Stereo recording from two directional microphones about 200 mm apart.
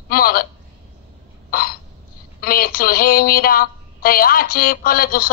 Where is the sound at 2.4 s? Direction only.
45° left (ahead or behind).